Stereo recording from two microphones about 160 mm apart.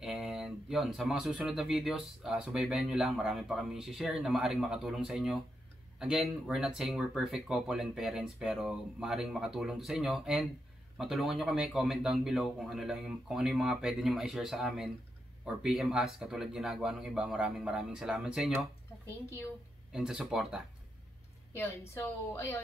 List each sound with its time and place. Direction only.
0.0 s speech: centre (ahead or behind)
19.0 s a woman's voice: 15° left (ahead or behind)
19.9 s speech: 5° right (ahead or behind)
21.5 s a woman's voice: 15° left (ahead or behind)